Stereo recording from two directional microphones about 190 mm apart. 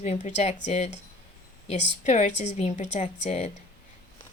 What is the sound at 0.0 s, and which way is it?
Speech, 35° left (ahead or behind).